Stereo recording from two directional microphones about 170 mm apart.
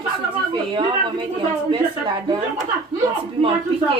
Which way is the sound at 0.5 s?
30° right (ahead or behind).